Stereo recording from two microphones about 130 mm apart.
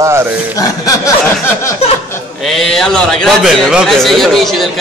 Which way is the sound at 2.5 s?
5° left (ahead or behind).